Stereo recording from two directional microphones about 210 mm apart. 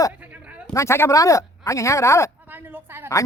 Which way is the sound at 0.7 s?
10° left (ahead or behind).